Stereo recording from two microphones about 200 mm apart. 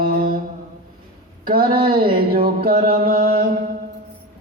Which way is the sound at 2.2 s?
50° right (ahead or behind).